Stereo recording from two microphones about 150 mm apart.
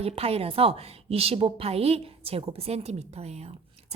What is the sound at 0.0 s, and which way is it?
A woman's voice, 40° right (ahead or behind).